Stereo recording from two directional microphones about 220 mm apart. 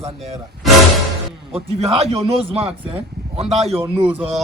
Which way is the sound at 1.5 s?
30° right (ahead or behind).